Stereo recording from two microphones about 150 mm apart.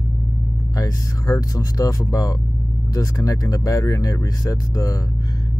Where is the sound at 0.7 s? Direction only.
20° left (ahead or behind).